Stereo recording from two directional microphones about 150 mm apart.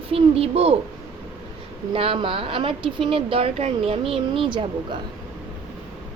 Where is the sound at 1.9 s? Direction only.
35° right (ahead or behind).